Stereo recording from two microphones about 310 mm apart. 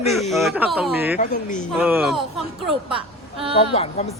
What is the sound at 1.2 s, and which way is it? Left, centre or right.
Speech, left.